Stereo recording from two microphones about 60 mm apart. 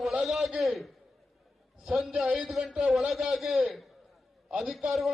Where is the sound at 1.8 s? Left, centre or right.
Centre.